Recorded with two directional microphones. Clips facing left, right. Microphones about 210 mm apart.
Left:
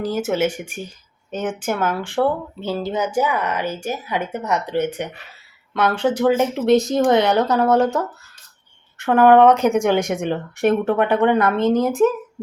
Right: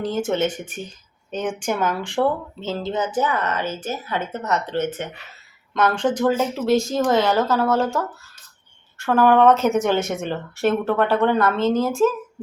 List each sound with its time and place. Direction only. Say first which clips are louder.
0.0 s speech: left 1 dB; 10° left (ahead or behind)